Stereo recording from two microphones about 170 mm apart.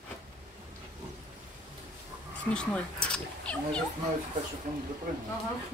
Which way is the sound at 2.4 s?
5° left (ahead or behind).